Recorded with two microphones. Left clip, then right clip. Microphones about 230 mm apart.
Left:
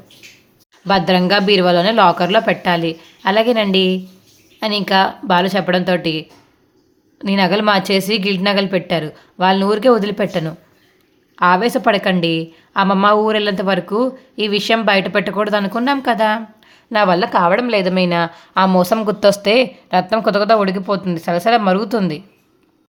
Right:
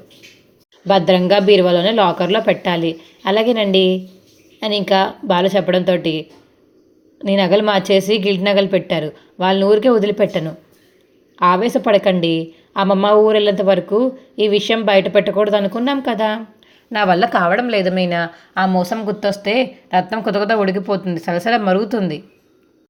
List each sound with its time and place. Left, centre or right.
0.9 s speech: centre
17.2 s speech: centre
18.7 s speech: left